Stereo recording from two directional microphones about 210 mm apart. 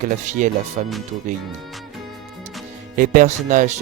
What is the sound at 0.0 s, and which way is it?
Mantra, 40° right (ahead or behind).